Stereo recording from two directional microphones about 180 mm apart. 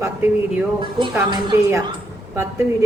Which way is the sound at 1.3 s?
15° right (ahead or behind).